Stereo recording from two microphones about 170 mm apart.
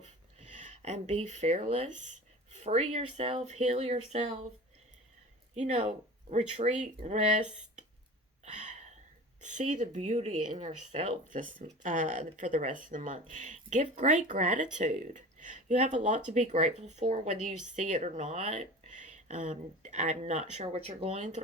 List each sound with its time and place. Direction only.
0.3 s speech: 45° right (ahead or behind)
5.5 s speech: 40° right (ahead or behind)
8.4 s a sound: 45° right (ahead or behind)
9.4 s speech: 45° right (ahead or behind)